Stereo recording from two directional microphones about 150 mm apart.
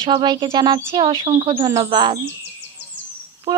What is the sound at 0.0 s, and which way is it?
Speech, 30° right (ahead or behind).